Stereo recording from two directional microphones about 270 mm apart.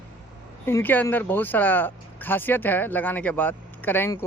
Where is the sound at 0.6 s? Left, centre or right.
Centre.